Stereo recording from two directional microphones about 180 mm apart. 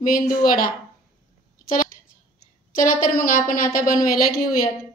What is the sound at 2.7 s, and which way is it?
A woman's voice, 50° left (ahead or behind).